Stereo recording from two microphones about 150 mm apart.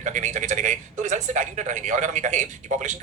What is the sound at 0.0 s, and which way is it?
A man's voice, 55° right (ahead or behind).